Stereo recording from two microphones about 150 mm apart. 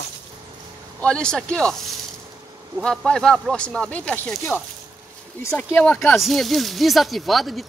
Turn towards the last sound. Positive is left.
turn(degrees=0)  # may be behind; listen again after turning